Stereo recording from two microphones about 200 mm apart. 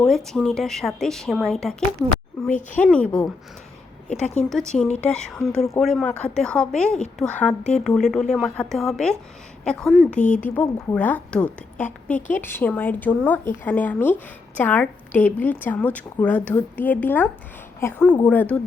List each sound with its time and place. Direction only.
0.3 s a woman's voice: 5° left (ahead or behind)
2.7 s a woman's voice: 5° left (ahead or behind)